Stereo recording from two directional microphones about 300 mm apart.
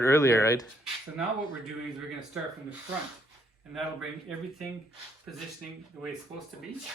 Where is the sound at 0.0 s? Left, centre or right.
Centre.